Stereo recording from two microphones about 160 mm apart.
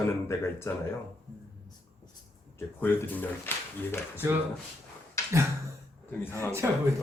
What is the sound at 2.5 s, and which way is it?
Speech, 10° left (ahead or behind).